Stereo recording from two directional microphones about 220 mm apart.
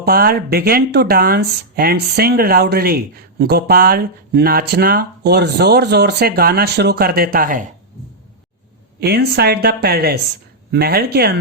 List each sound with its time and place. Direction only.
0.0 s speech: 45° right (ahead or behind)
9.0 s speech: 50° right (ahead or behind)